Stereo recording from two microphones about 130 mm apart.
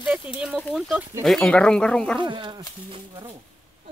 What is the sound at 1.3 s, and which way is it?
Speech, 5° left (ahead or behind).